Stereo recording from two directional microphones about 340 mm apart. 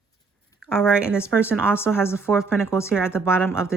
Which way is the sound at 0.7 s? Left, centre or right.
Centre.